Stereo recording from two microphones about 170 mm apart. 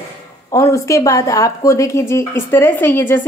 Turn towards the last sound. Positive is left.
turn(degrees=15)  # may be behind; listen again after turning